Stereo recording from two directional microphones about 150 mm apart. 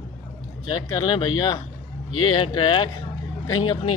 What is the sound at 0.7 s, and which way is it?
A man's voice, 25° left (ahead or behind).